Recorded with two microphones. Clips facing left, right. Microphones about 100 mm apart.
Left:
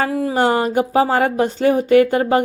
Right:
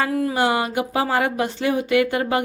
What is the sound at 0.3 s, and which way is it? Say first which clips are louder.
Speech: left 7 dB; 40° left (ahead or behind).